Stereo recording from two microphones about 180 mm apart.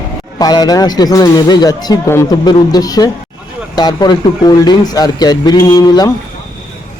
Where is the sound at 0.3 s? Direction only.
20° left (ahead or behind).